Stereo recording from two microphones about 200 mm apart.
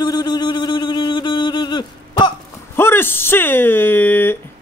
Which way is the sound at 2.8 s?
10° left (ahead or behind).